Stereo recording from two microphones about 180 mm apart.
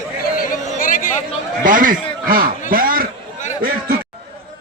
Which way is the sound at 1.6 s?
50° right (ahead or behind).